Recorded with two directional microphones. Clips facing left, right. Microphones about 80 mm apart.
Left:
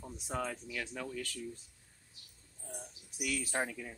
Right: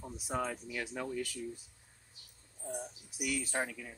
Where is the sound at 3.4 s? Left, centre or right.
Centre.